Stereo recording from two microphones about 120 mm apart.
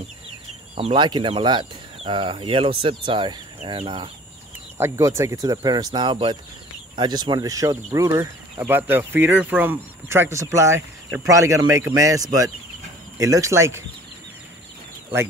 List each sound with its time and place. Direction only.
0.9 s speech: 40° right (ahead or behind)
4.7 s speech: 25° right (ahead or behind)